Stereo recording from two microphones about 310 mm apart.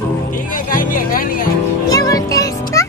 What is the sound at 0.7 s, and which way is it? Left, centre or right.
Speech, left.